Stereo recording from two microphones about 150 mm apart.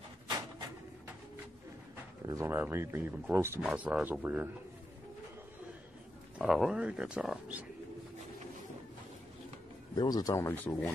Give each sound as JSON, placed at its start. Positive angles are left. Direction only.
{"t": 2.2, "sound": "speech", "side_deg": -20}
{"t": 6.3, "sound": "speech", "side_deg": 0}
{"t": 9.9, "sound": "a man's voice", "side_deg": 25}